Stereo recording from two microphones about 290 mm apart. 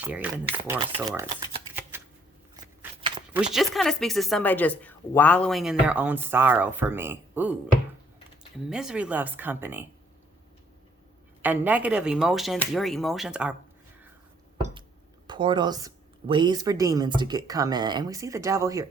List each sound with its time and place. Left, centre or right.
0.0 s speech: centre
2.6 s a sound: centre
3.3 s speech: centre
8.7 s speech: centre
11.4 s speech: centre
14.6 s a sound: centre
15.3 s speech: centre